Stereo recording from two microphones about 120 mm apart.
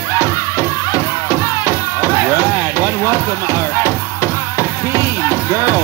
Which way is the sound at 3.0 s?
25° left (ahead or behind).